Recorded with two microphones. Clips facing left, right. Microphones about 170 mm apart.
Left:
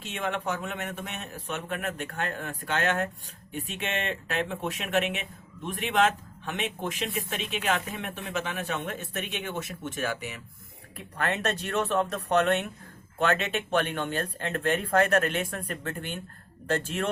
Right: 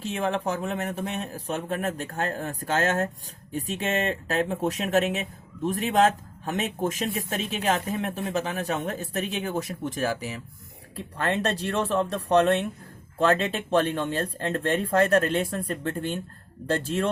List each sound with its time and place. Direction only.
0.0 s speech: 35° right (ahead or behind)